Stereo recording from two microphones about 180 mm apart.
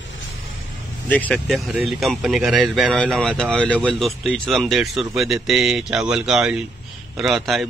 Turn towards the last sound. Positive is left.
turn(degrees=0)  # may be behind; listen again after turning